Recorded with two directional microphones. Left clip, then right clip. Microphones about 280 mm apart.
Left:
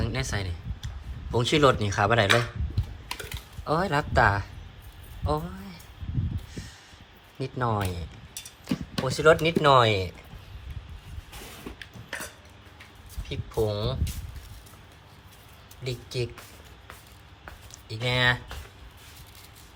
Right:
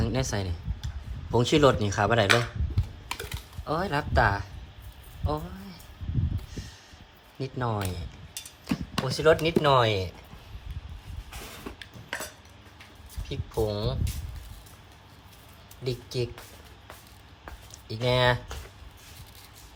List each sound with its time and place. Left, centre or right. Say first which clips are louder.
0.0 s speech: right 1 dB; centre
3.1 s typing: even; centre
5.2 s a sound: left 3 dB; centre
7.3 s speech: left 3 dB; centre
11.7 s a sound: even; centre
13.2 s speech: left 1 dB; centre
15.8 s speech: right 1 dB; centre
17.7 s speech: right 2 dB; centre